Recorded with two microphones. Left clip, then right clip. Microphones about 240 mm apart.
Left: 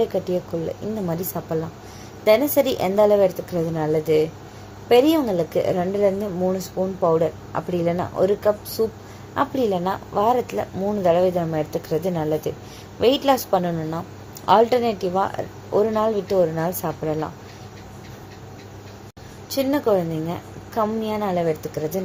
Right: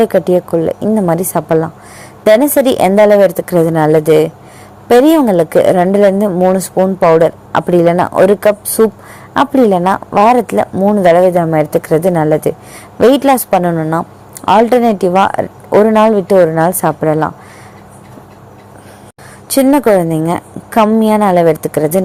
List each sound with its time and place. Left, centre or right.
0.0 s a woman's voice: right
19.5 s a woman's voice: right